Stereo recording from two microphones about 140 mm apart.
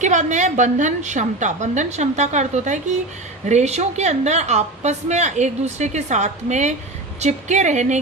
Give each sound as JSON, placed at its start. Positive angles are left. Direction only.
{"t": 0.0, "sound": "a woman's voice", "side_deg": -60}